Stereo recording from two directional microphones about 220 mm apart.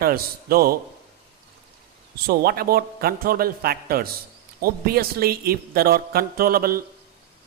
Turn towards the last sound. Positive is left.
turn(degrees=-40)  # may be behind; listen again after turning